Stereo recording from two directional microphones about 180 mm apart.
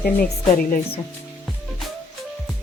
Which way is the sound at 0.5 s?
50° left (ahead or behind).